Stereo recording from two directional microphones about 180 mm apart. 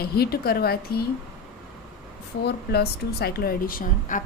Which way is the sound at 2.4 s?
60° left (ahead or behind).